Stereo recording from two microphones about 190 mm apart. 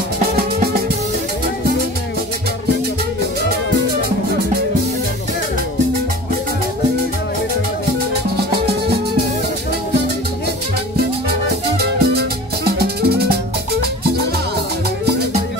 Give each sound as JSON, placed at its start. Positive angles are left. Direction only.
{"t": 8.4, "sound": "music", "side_deg": -60}
{"t": 11.8, "sound": "music", "side_deg": -55}